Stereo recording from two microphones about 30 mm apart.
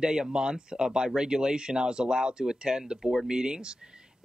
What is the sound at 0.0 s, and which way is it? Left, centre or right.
Speech, right.